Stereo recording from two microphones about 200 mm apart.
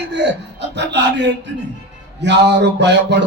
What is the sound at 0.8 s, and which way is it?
Speech, 60° right (ahead or behind).